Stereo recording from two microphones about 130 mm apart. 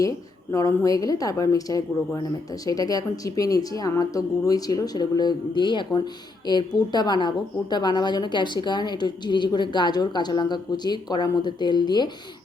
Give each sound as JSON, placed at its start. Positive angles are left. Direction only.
{"t": 0.5, "sound": "a woman's voice", "side_deg": 25}